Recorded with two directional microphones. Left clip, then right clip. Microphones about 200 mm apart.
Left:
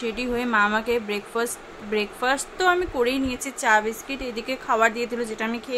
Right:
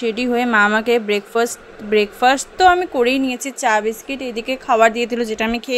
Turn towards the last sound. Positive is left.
turn(degrees=-30)  # may be behind; listen again after turning